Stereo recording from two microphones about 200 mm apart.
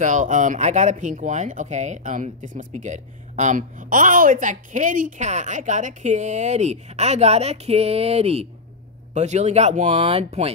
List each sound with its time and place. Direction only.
0.0 s speech: 40° right (ahead or behind)